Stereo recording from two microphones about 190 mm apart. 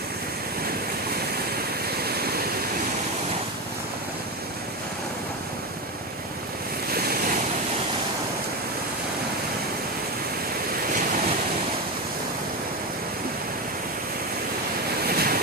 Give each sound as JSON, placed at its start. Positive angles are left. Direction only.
{"t": 6.9, "sound": "waves", "side_deg": -55}
{"t": 15.0, "sound": "waves", "side_deg": -55}